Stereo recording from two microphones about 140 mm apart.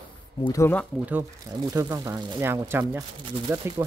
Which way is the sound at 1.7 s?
25° right (ahead or behind).